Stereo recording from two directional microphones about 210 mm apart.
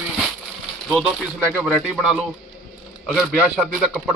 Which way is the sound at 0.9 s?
Centre (ahead or behind).